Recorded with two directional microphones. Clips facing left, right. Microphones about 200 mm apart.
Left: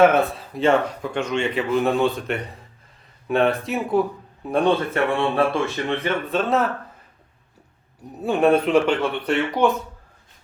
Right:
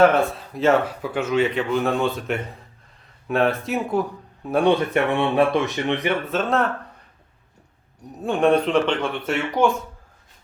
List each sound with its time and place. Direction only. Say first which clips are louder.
0.0 s speech: even; centre (ahead or behind)
4.7 s speech: right 1 dB; 15° right (ahead or behind)
6.3 s speech: left 2 dB; centre (ahead or behind)
8.2 s speech: left 1 dB; 5° left (ahead or behind)